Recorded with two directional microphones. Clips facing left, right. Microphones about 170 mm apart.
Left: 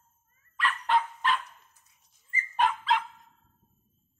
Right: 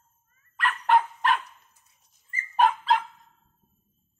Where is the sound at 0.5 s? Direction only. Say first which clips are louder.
Right 4 dB; 50° right (ahead or behind).